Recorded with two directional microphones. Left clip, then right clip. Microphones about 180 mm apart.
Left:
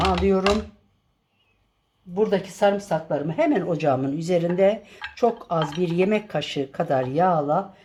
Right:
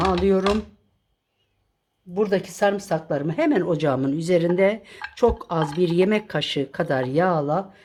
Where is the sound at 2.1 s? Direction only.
50° right (ahead or behind).